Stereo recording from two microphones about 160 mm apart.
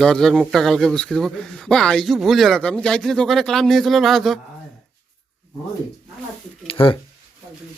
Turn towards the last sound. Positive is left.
turn(degrees=35)  # may be behind; listen again after turning